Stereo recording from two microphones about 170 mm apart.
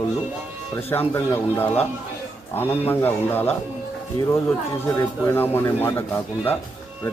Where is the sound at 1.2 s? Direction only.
15° left (ahead or behind).